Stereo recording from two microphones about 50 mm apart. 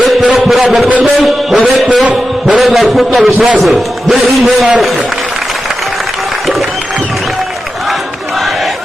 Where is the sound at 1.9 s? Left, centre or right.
Right.